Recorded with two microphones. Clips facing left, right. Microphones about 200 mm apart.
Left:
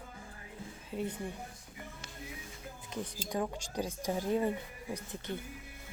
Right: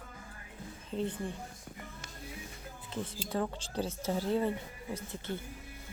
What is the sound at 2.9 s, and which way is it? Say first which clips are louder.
A woman's voice: right 1 dB; 15° left (ahead or behind).